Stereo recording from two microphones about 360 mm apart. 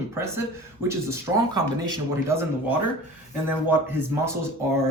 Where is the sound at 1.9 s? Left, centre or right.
Centre.